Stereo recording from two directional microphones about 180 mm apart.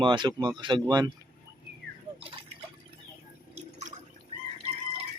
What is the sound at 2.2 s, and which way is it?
Drip, 30° right (ahead or behind).